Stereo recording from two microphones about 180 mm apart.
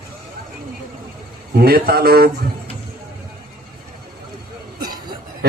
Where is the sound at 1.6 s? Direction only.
60° right (ahead or behind).